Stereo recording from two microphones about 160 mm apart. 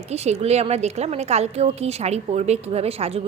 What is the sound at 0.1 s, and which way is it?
Speech, 40° right (ahead or behind).